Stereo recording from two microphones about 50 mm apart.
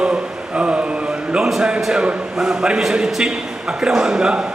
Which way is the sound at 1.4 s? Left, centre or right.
Centre.